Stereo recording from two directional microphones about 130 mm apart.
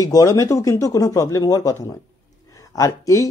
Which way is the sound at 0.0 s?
30° left (ahead or behind).